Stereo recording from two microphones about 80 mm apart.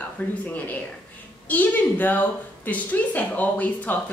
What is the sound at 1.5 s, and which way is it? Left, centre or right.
A woman's voice, left.